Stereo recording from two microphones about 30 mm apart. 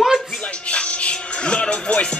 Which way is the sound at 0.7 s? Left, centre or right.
Left.